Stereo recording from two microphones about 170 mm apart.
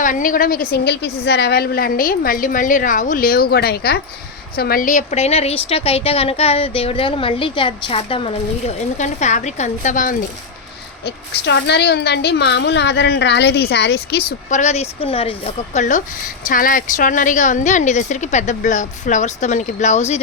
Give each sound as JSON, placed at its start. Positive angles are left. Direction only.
{"t": 0.0, "sound": "a woman's voice", "side_deg": 50}
{"t": 9.0, "sound": "a woman's voice", "side_deg": 45}
{"t": 11.0, "sound": "a woman's voice", "side_deg": 90}
{"t": 14.5, "sound": "a woman's voice", "side_deg": 40}